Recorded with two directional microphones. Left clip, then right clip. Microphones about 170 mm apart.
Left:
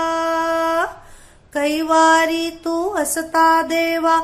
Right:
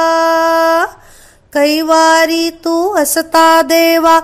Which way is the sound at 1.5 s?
35° right (ahead or behind).